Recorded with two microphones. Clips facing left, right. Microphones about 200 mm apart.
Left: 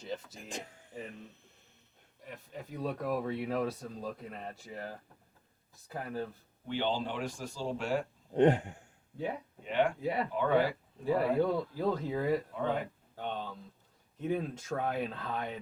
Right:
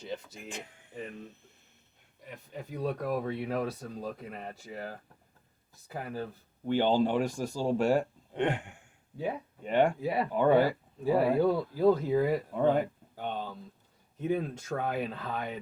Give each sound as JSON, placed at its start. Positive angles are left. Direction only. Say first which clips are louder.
{"t": 0.0, "sound": "speech", "louder": "right 1 dB", "side_deg": 0}
{"t": 0.3, "sound": "a sound", "louder": "right 1 dB", "side_deg": 35}
{"t": 2.2, "sound": "speech", "louder": "right 2 dB", "side_deg": 0}
{"t": 6.7, "sound": "speech", "louder": "right 7 dB", "side_deg": -45}
{"t": 8.3, "sound": "a sound", "louder": "left 6 dB", "side_deg": 40}
{"t": 9.6, "sound": "speech", "louder": "right 4 dB", "side_deg": -45}
{"t": 10.0, "sound": "speech", "louder": "right 2 dB", "side_deg": -5}
{"t": 10.3, "sound": "speech", "louder": "right 6 dB", "side_deg": -45}
{"t": 11.0, "sound": "speech", "louder": "right 4 dB", "side_deg": -5}
{"t": 12.5, "sound": "speech", "louder": "right 7 dB", "side_deg": -45}
{"t": 13.1, "sound": "speech", "louder": "right 2 dB", "side_deg": -5}